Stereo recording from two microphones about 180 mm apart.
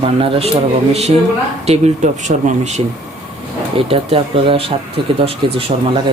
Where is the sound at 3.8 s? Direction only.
30° right (ahead or behind).